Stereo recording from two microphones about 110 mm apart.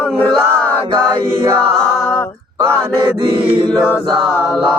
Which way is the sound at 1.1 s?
45° right (ahead or behind).